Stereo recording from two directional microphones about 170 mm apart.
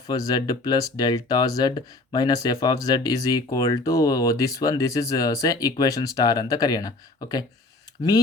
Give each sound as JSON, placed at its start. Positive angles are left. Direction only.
{"t": 0.1, "sound": "speech", "side_deg": 20}